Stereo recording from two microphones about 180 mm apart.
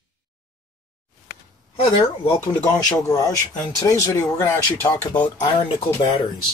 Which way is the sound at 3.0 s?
20° left (ahead or behind).